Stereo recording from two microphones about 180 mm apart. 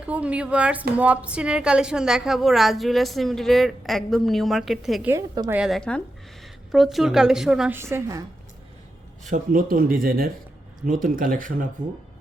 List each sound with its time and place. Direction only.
0.0 s a woman's voice: 5° right (ahead or behind)
5.1 s a woman's voice: 20° right (ahead or behind)
5.5 s a woman's voice: 5° right (ahead or behind)
7.8 s a woman's voice: 15° right (ahead or behind)
9.3 s speech: 50° right (ahead or behind)